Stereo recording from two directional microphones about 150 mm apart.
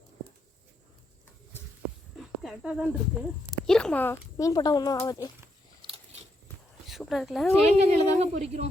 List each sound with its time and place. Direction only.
2.1 s speech: centre (ahead or behind)
3.7 s speech: 5° left (ahead or behind); by 5.3 s 25° left (ahead or behind)
6.8 s a sound: centre (ahead or behind)
7.8 s speech: 45° right (ahead or behind)